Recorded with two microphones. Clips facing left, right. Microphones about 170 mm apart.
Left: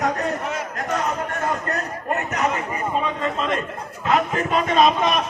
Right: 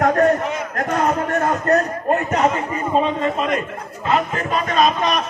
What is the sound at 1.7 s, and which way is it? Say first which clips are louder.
A man's voice: right 9 dB; 30° right (ahead or behind).